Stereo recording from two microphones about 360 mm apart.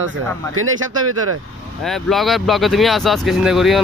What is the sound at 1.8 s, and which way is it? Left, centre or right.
Speech, centre.